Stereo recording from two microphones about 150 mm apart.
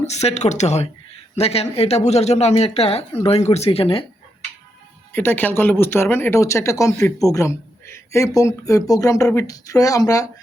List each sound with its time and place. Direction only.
0.0 s speech: 45° left (ahead or behind)
5.1 s speech: 10° left (ahead or behind)